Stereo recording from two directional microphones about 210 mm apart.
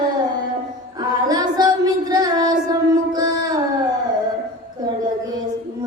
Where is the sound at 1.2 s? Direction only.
20° right (ahead or behind).